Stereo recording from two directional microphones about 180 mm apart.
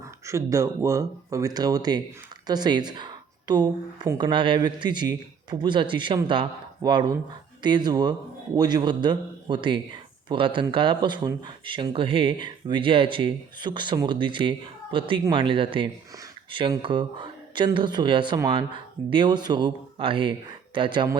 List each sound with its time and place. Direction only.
0.0 s speech: 15° right (ahead or behind)